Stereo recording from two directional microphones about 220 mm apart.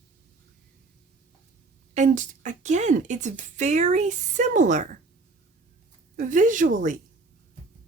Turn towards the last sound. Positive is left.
turn(degrees=-35)  # may be behind; listen again after turning